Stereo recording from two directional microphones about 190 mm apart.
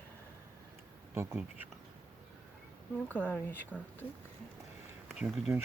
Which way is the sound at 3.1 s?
10° left (ahead or behind).